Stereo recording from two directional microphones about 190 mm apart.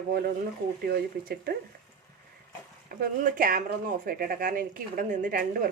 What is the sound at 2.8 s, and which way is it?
Speech, 50° right (ahead or behind).